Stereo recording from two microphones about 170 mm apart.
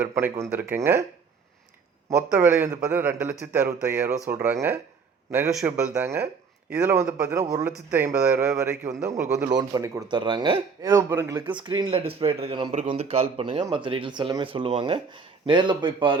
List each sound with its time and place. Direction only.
0.0 s a man's voice: 10° right (ahead or behind)
2.0 s a man's voice: 10° right (ahead or behind)
11.4 s a man's voice: 25° right (ahead or behind)